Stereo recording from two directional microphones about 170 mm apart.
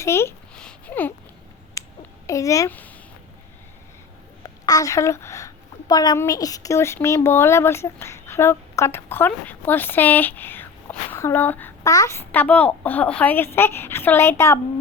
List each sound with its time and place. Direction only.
0.0 s a sound: 15° left (ahead or behind)
2.2 s speech: 20° left (ahead or behind)
4.4 s a woman's voice: 20° left (ahead or behind)